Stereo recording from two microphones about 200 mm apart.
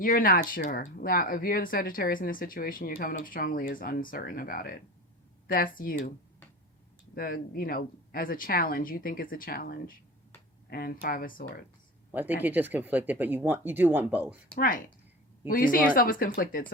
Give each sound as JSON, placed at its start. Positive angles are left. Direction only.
{"t": 0.0, "sound": "speech", "side_deg": 45}
{"t": 7.2, "sound": "speech", "side_deg": 45}
{"t": 12.1, "sound": "speech", "side_deg": -10}
{"t": 14.5, "sound": "speech", "side_deg": 40}